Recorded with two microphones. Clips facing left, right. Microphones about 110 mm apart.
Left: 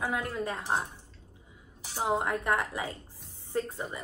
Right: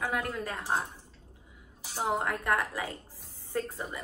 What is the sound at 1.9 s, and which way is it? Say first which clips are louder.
A woman's voice: left 1 dB; 20° left (ahead or behind).